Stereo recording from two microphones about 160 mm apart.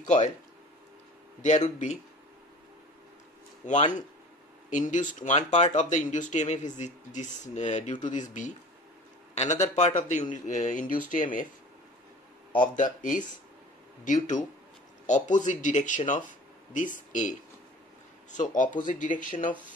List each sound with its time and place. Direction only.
0.0 s speech: 50° left (ahead or behind)
1.4 s speech: 50° left (ahead or behind)
3.6 s speech: 50° left (ahead or behind)
14.0 s speech: 50° left (ahead or behind)
18.3 s speech: 55° left (ahead or behind)